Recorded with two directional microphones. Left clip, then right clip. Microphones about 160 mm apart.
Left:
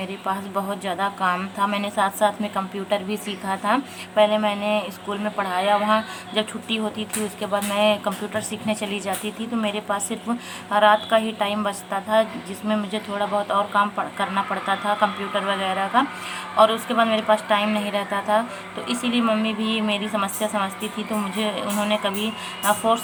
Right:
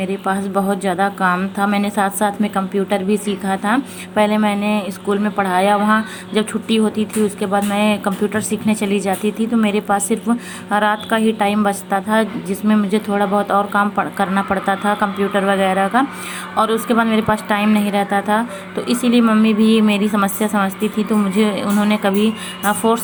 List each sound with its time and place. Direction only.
0.0 s a woman's voice: 20° right (ahead or behind)